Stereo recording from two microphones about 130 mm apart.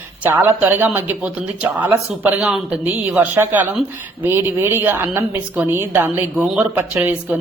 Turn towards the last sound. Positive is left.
turn(degrees=-10)  # may be behind; listen again after turning